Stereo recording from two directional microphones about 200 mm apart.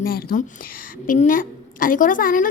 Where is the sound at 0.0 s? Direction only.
45° left (ahead or behind).